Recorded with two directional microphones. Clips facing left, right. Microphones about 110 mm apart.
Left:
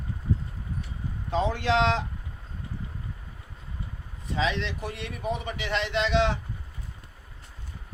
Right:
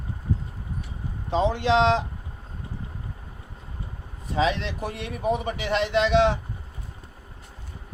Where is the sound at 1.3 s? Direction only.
25° right (ahead or behind).